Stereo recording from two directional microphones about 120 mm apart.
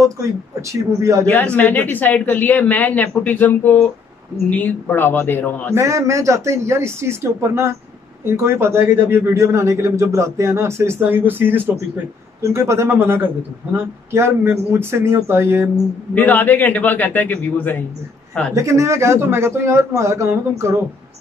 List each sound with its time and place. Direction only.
0.6 s speech: 25° right (ahead or behind)
1.2 s speech: 10° left (ahead or behind)
5.8 s speech: 25° right (ahead or behind)
16.2 s speech: 15° left (ahead or behind)
18.5 s speech: 25° right (ahead or behind)